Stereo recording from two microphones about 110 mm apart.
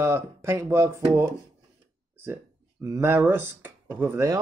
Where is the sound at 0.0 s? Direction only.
25° right (ahead or behind).